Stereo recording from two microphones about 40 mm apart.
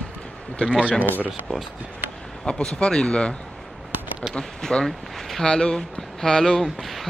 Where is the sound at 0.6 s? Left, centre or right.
Left.